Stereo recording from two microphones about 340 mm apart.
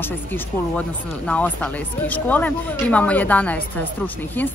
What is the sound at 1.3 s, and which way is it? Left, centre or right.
Speech, centre.